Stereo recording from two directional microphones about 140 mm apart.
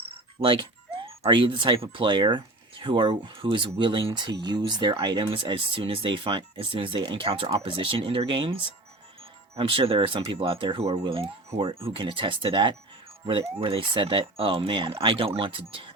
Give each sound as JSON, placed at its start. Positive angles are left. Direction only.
{"t": 0.3, "sound": "speech", "side_deg": -35}
{"t": 9.6, "sound": "speech", "side_deg": -40}